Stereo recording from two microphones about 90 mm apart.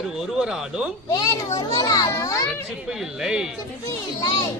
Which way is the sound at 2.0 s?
35° left (ahead or behind).